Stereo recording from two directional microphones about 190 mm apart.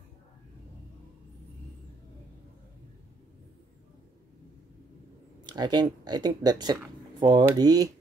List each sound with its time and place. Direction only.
5.4 s speech: 20° right (ahead or behind)